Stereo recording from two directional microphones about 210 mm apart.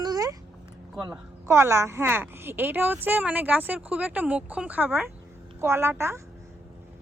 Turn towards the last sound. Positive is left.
turn(degrees=-10)  # may be behind; listen again after turning